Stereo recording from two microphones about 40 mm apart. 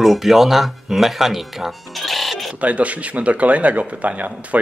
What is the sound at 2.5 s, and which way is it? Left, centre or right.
Speech, right.